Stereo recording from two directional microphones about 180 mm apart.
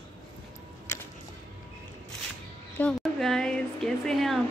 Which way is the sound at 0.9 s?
15° left (ahead or behind).